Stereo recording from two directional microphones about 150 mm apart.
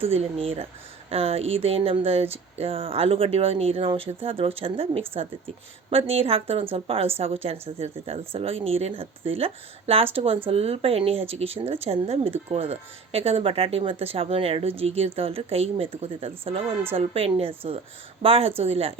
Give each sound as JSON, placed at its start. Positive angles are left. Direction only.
{"t": 0.0, "sound": "a woman's voice", "side_deg": -40}